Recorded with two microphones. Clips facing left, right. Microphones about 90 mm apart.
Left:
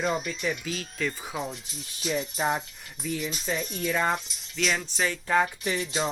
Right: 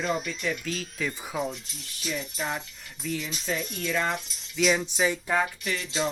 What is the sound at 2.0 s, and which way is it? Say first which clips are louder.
Music: left 4 dB; 30° left (ahead or behind).